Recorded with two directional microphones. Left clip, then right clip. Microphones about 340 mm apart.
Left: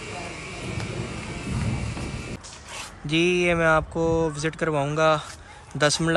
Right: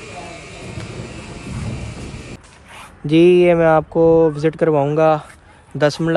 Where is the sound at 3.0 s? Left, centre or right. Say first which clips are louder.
Right 10 dB; centre.